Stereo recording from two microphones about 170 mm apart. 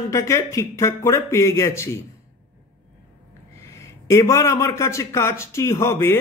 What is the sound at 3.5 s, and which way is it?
A man's voice, 15° left (ahead or behind).